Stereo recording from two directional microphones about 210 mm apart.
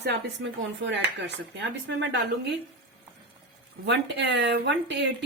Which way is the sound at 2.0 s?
55° right (ahead or behind).